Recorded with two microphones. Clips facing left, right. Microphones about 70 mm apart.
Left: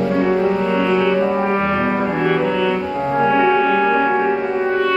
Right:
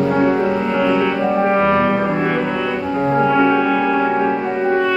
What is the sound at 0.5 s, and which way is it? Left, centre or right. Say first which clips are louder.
Music: even; centre.